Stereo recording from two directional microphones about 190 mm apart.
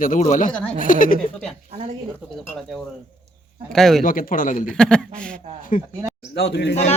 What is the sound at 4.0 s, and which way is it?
Speech, 45° left (ahead or behind).